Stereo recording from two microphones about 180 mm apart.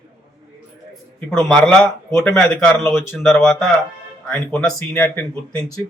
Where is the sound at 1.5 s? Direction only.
5° left (ahead or behind).